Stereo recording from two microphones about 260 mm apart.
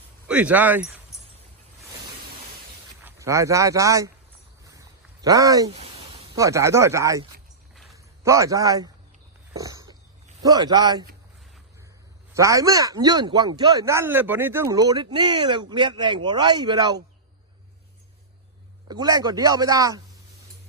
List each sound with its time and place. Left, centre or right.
0.3 s speech: centre
3.0 s speech: centre
4.6 s a sound: centre
6.3 s a man's voice: centre
9.6 s a sound: centre
10.4 s speech: centre
12.3 s speech: centre
18.9 s speech: centre